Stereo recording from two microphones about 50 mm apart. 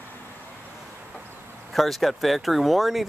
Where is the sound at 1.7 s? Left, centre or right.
Centre.